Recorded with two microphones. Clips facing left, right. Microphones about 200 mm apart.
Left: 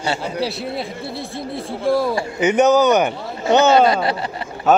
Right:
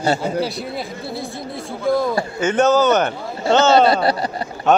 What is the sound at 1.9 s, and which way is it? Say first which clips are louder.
A man's voice: even; 5° left (ahead or behind).